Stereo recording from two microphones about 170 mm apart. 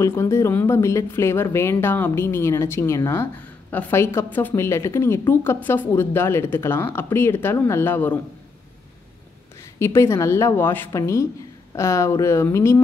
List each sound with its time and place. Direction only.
0.0 s speech: 15° left (ahead or behind)
9.8 s speech: 15° left (ahead or behind)